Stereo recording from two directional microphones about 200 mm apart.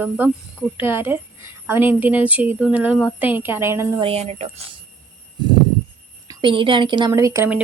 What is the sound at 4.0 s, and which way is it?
Speech, 30° right (ahead or behind).